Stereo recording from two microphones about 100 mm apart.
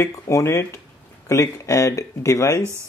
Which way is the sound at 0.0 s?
30° left (ahead or behind).